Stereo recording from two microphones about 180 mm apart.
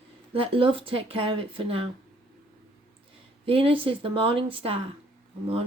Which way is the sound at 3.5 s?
30° right (ahead or behind).